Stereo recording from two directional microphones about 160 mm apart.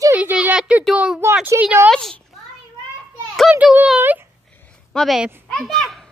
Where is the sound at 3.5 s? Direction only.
10° right (ahead or behind).